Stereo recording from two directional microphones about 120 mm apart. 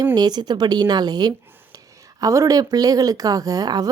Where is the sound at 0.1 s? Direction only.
35° right (ahead or behind).